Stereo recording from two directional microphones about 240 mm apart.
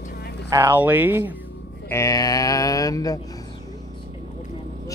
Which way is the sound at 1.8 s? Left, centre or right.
Centre.